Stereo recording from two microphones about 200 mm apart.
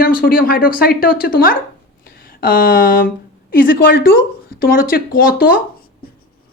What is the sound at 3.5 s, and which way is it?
Speech, 45° left (ahead or behind).